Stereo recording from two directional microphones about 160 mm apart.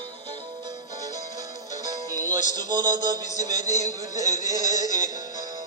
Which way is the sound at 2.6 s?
25° right (ahead or behind).